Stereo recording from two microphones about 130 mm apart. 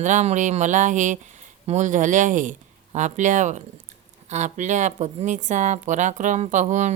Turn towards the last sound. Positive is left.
turn(degrees=-65)  # may be behind; listen again after turning